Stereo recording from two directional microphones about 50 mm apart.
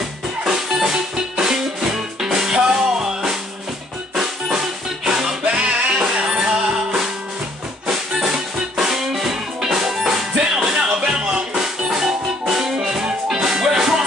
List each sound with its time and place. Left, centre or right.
0.4 s music: centre
4.1 s drum kit: centre
5.4 s music: centre